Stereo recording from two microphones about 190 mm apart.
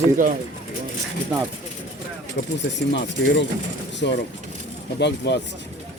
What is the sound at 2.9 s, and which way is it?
Speech, 70° left (ahead or behind).